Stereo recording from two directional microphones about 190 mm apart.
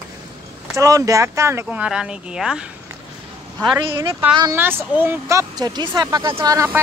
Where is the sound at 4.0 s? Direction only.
10° right (ahead or behind).